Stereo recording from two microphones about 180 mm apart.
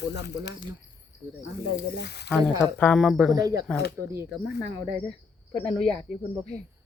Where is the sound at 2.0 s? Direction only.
65° left (ahead or behind).